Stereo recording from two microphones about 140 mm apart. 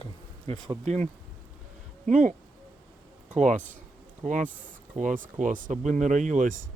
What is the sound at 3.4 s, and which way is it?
A man's voice, 60° right (ahead or behind).